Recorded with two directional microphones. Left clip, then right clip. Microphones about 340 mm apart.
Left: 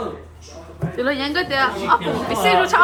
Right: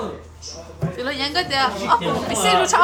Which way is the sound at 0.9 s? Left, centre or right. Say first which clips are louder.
Left 2 dB; centre.